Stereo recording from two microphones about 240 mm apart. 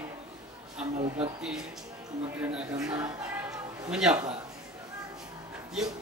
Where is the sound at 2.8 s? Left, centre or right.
Centre.